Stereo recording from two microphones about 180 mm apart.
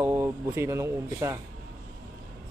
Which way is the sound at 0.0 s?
15° right (ahead or behind).